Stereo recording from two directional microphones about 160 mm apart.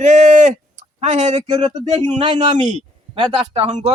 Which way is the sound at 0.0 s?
45° right (ahead or behind).